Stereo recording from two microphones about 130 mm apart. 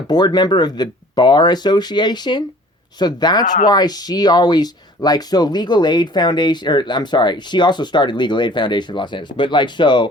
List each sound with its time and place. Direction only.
0.1 s speech: 35° left (ahead or behind)
3.4 s speech: 80° left
3.7 s speech: 30° left (ahead or behind)